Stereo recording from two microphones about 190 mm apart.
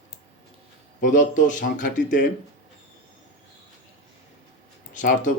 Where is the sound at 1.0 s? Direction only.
45° left (ahead or behind).